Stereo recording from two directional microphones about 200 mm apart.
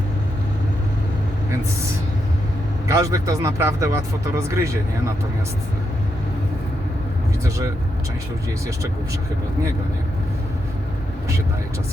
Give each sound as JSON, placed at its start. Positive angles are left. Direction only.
{"t": 2.8, "sound": "speech", "side_deg": -15}